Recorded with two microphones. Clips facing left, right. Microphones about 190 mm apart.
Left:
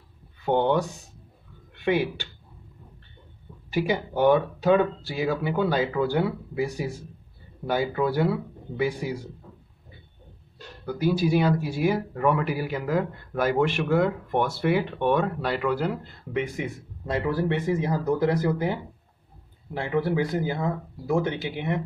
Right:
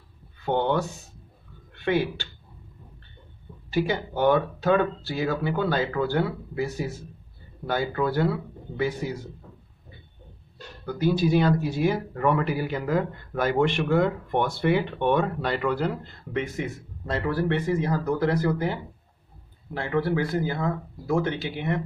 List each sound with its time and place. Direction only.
0.5 s speech: 15° left (ahead or behind)
3.7 s speech: 15° left (ahead or behind)
10.9 s speech: 10° left (ahead or behind)